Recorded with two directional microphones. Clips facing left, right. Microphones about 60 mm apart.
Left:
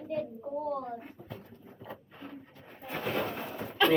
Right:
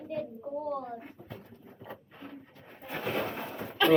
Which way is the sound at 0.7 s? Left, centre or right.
Centre.